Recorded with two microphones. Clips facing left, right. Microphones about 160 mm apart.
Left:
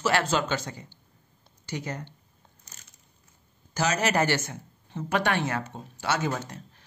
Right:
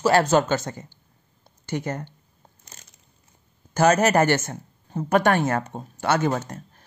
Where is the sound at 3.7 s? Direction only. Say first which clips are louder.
Right 8 dB; 50° right (ahead or behind).